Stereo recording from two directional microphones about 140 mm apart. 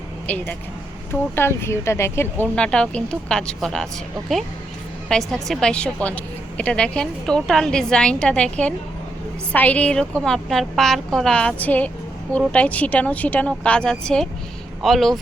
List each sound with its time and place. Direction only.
0.3 s a woman's voice: 10° left (ahead or behind)
2.6 s a woman's voice: 5° left (ahead or behind)
5.0 s a woman's voice: 5° left (ahead or behind)